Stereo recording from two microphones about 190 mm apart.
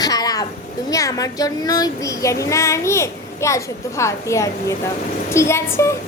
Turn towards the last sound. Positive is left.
turn(degrees=15)  # may be behind; listen again after turning